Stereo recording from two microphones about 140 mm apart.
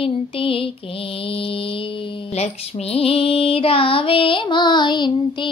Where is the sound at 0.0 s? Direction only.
40° left (ahead or behind).